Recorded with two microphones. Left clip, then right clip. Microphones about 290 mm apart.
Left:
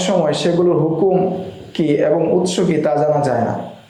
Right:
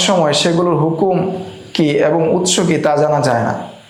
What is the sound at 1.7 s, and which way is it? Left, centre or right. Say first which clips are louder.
A man's voice: right 2 dB; right.